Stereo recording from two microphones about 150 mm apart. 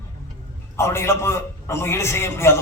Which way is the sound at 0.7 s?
20° left (ahead or behind).